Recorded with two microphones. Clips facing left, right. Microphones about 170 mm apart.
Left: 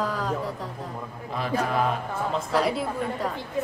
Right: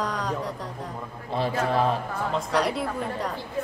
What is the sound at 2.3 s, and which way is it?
Speech, centre (ahead or behind).